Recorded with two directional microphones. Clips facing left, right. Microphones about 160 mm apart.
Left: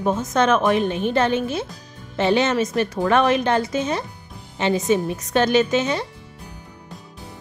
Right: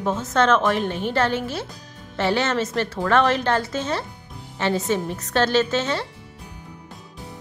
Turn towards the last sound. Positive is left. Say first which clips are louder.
# left 2 dB
turn(degrees=15)  # may be behind; listen again after turning